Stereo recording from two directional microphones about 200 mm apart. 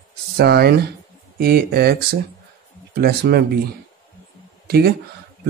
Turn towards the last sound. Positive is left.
turn(degrees=-50)  # may be behind; listen again after turning